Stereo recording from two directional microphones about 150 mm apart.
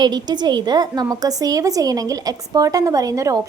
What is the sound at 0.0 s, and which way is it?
A woman's voice, 30° right (ahead or behind).